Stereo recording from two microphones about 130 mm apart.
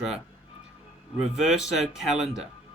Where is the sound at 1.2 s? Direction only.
5° right (ahead or behind).